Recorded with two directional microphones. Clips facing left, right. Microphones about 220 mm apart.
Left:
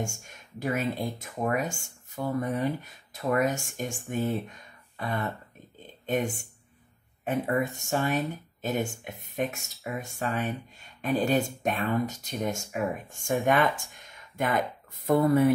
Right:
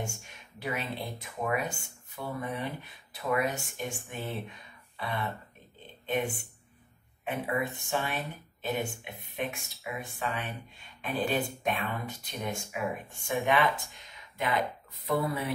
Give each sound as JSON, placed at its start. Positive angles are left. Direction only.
{"t": 0.0, "sound": "speech", "side_deg": 45}
{"t": 14.0, "sound": "a sound", "side_deg": 50}
{"t": 15.0, "sound": "speech", "side_deg": 45}